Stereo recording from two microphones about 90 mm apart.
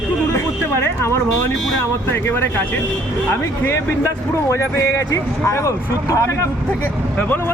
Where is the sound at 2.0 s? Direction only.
25° left (ahead or behind).